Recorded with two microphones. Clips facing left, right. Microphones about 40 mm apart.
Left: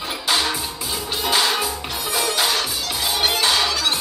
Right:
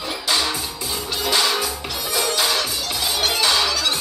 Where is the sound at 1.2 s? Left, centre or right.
Left.